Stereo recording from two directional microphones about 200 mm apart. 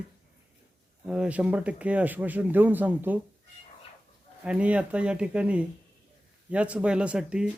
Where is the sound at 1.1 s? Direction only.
5° right (ahead or behind).